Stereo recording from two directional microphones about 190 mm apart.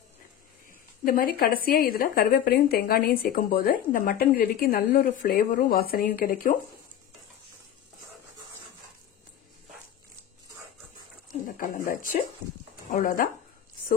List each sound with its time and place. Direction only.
1.0 s speech: 50° left (ahead or behind)
11.2 s a sound: 50° left (ahead or behind)
12.9 s speech: 45° left (ahead or behind)